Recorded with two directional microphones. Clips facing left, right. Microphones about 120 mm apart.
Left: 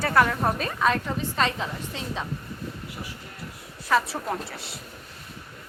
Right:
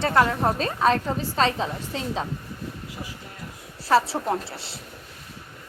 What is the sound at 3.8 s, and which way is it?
Speech, 30° right (ahead or behind).